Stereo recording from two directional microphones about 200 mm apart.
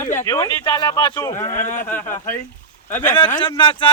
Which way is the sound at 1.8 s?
10° left (ahead or behind).